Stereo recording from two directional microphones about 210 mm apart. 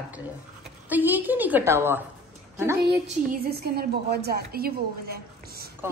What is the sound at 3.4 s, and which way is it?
A woman's voice, 45° right (ahead or behind).